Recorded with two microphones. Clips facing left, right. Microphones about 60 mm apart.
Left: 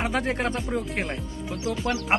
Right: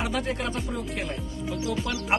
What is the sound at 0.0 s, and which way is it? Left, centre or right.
Speech, left.